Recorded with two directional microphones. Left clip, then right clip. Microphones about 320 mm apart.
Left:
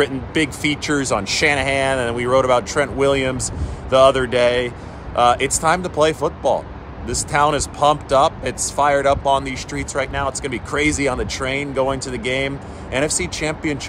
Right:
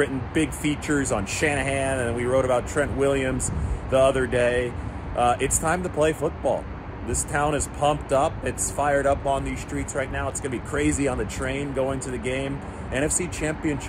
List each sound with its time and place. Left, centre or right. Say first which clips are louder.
0.0 s speech: left 5 dB; centre